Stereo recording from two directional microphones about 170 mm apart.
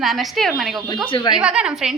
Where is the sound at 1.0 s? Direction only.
30° left (ahead or behind).